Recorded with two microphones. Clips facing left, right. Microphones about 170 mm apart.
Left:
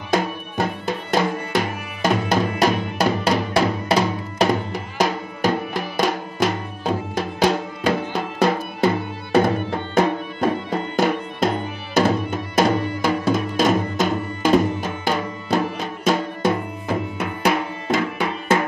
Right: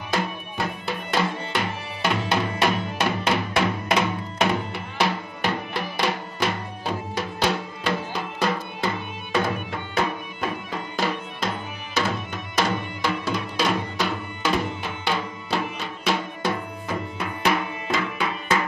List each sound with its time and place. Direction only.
0.1 s music: 45° left (ahead or behind)
10.7 s music: 50° left (ahead or behind)
17.2 s music: 45° left (ahead or behind)